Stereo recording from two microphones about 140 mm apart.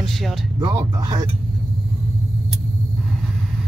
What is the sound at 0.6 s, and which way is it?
Speech, 35° right (ahead or behind).